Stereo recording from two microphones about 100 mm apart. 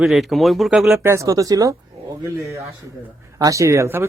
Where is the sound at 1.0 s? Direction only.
30° right (ahead or behind).